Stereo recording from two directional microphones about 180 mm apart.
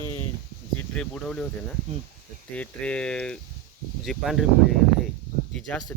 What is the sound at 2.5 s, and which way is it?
Speech, 5° left (ahead or behind).